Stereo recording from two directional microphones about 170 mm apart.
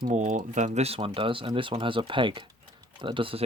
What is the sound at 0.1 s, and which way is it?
Speech, 50° right (ahead or behind).